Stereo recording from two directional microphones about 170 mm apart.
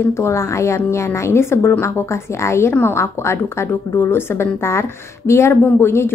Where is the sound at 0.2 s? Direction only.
15° left (ahead or behind).